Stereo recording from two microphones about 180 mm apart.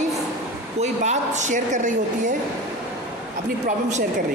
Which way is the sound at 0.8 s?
40° right (ahead or behind).